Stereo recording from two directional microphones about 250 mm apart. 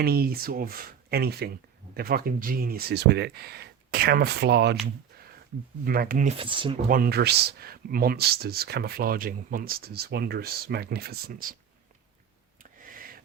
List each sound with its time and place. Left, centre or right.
0.0 s speech: right
5.8 s speech: right; by 6.7 s centre
6.8 s speech: right
12.8 s a sound: right